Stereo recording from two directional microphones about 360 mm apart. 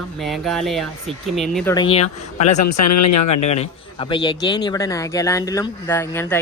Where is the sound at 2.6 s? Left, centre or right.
Left.